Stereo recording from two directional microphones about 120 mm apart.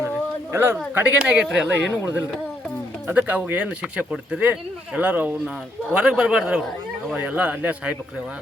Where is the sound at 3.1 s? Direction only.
15° right (ahead or behind).